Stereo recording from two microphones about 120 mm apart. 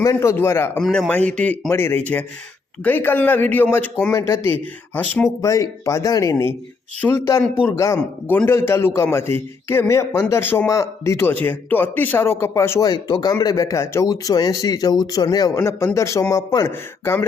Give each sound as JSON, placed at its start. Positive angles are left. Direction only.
{"t": 0.0, "sound": "a man's voice", "side_deg": 25}
{"t": 0.8, "sound": "a man's voice", "side_deg": 5}
{"t": 1.7, "sound": "a man's voice", "side_deg": 20}
{"t": 5.4, "sound": "a man's voice", "side_deg": 25}
{"t": 8.4, "sound": "a man's voice", "side_deg": 20}
{"t": 12.9, "sound": "a man's voice", "side_deg": 35}